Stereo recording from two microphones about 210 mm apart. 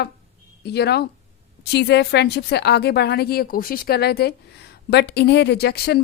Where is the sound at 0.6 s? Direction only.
50° left (ahead or behind).